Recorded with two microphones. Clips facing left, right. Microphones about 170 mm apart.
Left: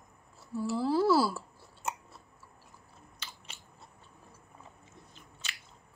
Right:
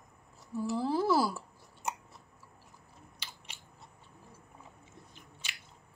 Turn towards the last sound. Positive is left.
turn(degrees=-10)  # may be behind; listen again after turning